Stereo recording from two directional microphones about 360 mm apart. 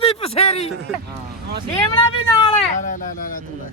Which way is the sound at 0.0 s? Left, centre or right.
Centre.